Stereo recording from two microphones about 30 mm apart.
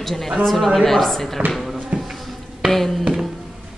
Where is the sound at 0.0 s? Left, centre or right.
Centre.